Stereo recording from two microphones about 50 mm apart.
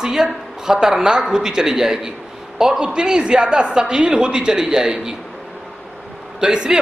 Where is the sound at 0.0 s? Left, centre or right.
Centre.